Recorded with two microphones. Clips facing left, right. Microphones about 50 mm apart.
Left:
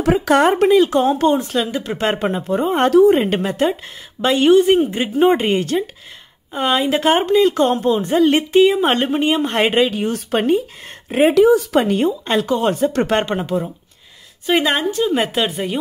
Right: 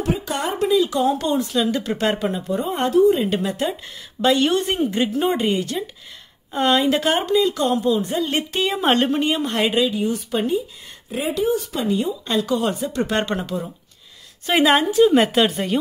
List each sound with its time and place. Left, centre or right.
0.2 s speech: left
0.7 s speech: left
2.9 s a woman's voice: left
3.2 s speech: left
6.5 s speech: centre; by 8.2 s left
8.6 s speech: centre
9.1 s speech: left
12.4 s speech: left
13.2 s speech: centre
14.4 s a woman's voice: centre